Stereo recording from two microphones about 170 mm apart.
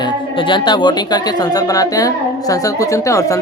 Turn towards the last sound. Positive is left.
turn(degrees=20)  # may be behind; listen again after turning